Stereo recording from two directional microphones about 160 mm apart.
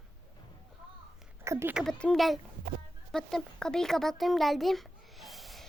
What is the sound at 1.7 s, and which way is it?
A child's voice, 5° left (ahead or behind).